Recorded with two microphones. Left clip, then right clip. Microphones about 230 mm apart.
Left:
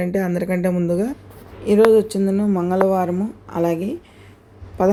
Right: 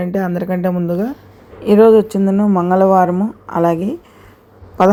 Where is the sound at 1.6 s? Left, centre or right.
Centre.